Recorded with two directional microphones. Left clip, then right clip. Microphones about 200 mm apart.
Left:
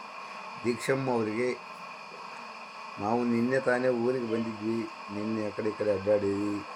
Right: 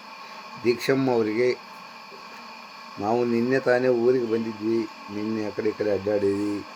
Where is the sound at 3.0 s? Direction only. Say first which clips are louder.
Right 5 dB; 35° right (ahead or behind).